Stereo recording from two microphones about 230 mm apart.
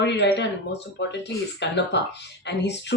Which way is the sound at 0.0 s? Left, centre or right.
Left.